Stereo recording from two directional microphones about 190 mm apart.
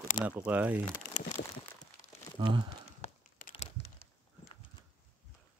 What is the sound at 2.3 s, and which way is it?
Speech, 25° right (ahead or behind).